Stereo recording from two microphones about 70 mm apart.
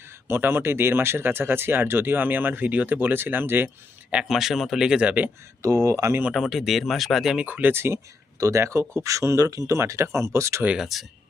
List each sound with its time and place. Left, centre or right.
0.3 s speech: right
4.3 s speech: centre; by 5.3 s right
5.6 s speech: right
6.3 s speech: centre
7.4 s speech: right
8.4 s speech: right
10.8 s speech: centre